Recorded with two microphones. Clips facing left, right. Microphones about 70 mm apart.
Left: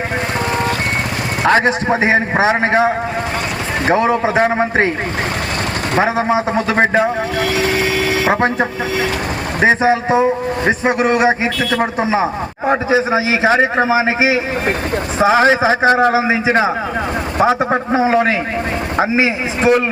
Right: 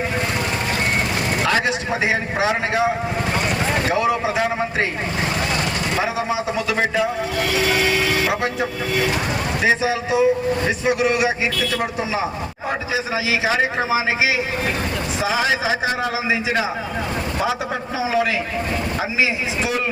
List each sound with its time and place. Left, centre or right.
1.5 s a man's voice: left
6.0 s a man's voice: left
9.6 s a man's voice: left